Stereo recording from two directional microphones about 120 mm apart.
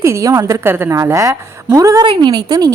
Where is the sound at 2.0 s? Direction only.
45° right (ahead or behind).